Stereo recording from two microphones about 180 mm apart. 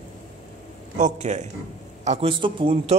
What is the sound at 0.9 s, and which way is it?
Speech, 45° right (ahead or behind).